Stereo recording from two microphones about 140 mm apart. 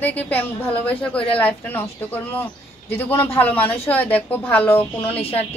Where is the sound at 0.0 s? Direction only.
10° left (ahead or behind).